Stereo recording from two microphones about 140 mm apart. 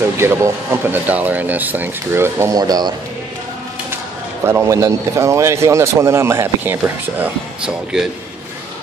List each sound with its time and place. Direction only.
0.2 s speech: 15° right (ahead or behind)
4.5 s speech: 20° right (ahead or behind); by 8.1 s 5° right (ahead or behind)